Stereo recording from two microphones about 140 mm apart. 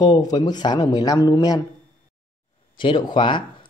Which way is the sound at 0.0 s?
30° left (ahead or behind).